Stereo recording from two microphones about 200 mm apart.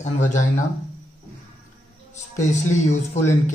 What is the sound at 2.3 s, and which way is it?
Speech, 35° left (ahead or behind).